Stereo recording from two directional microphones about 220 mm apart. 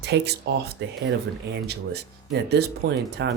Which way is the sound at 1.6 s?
50° right (ahead or behind).